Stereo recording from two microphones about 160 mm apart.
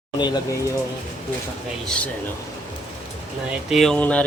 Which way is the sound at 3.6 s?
Centre (ahead or behind).